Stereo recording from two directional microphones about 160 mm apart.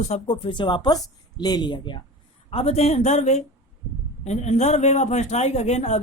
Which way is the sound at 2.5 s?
40° left (ahead or behind).